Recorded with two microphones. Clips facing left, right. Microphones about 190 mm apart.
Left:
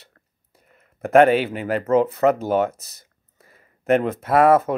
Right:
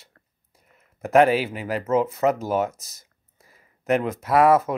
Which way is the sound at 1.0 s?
55° left (ahead or behind).